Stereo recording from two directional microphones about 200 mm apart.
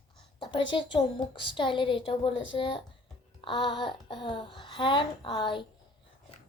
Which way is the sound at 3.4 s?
25° left (ahead or behind).